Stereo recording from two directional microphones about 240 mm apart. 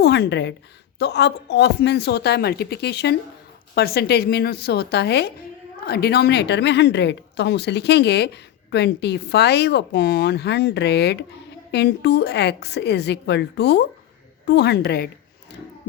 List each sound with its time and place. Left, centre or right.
0.0 s a woman's voice: left